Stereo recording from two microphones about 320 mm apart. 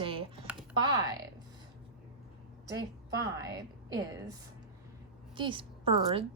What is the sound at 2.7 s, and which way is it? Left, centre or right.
Speech, centre.